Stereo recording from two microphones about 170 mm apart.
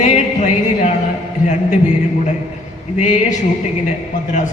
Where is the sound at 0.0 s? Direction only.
45° left (ahead or behind).